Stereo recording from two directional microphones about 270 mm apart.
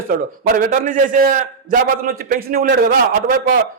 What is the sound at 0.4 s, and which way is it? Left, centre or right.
A man's voice, right.